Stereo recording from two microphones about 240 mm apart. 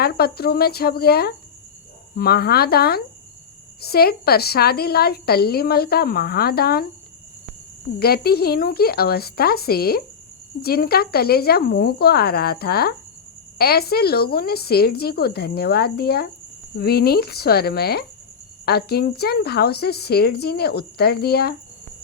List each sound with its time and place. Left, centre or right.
0.0 s a woman's voice: left
7.9 s a woman's voice: left